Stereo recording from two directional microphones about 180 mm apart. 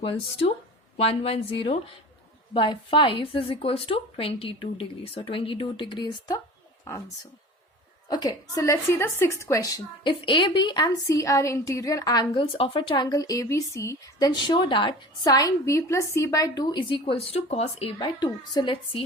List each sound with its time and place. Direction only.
0.0 s a woman's voice: 30° left (ahead or behind)
8.0 s a woman's voice: 20° left (ahead or behind)